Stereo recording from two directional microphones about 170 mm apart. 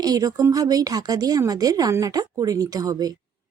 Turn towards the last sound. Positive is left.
turn(degrees=-20)  # may be behind; listen again after turning